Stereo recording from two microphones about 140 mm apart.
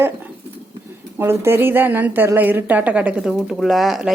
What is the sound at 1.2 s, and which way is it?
A woman's voice, 15° right (ahead or behind).